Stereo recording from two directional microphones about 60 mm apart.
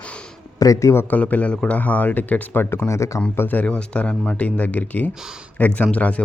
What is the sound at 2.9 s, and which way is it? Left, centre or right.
Speech, left.